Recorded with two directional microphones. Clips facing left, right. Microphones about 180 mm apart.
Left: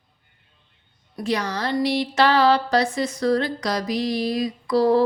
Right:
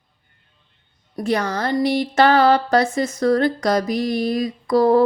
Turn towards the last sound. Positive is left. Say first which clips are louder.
# right 3 dB
turn(degrees=-50)  # may be behind; listen again after turning